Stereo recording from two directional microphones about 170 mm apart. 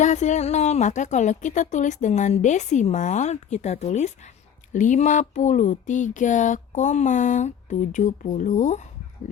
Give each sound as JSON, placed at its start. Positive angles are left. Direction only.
{"t": 0.0, "sound": "speech", "side_deg": 45}